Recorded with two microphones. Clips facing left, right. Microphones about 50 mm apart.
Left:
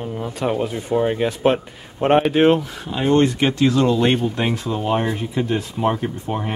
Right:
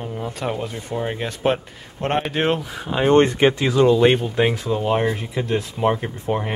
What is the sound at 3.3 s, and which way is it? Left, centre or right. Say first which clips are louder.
Speech: right 3 dB; centre.